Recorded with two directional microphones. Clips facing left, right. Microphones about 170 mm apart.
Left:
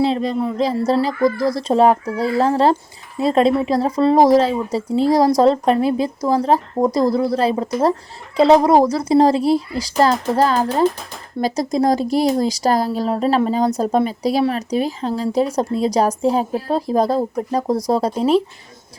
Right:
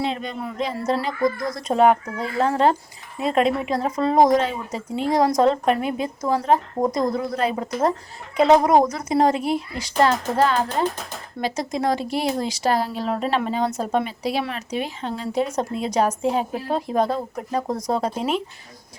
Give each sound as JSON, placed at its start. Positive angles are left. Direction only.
{"t": 0.0, "sound": "speech", "side_deg": 35}